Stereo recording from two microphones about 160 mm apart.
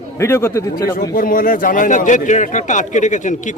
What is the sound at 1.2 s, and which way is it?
A man's voice, 60° left (ahead or behind).